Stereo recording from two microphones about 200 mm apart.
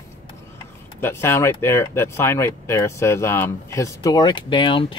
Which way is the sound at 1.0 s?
10° left (ahead or behind).